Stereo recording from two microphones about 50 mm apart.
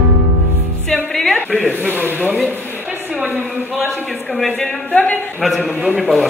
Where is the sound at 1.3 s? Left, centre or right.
Left.